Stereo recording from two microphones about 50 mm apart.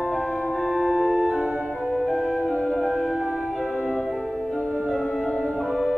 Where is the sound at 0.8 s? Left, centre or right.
Right.